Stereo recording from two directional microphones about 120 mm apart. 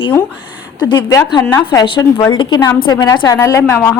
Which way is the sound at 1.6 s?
40° left (ahead or behind).